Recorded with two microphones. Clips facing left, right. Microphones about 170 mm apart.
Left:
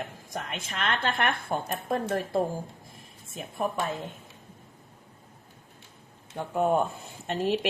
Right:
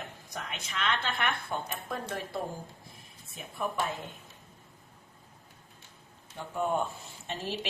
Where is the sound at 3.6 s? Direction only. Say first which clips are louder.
Left 4 dB; 40° left (ahead or behind).